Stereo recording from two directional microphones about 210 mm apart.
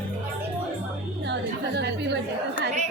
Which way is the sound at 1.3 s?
55° right (ahead or behind).